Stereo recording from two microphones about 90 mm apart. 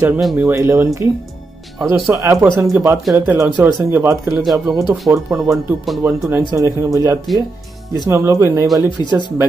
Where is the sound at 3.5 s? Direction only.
25° right (ahead or behind).